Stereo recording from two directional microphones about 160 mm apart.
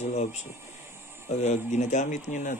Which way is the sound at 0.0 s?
45° left (ahead or behind).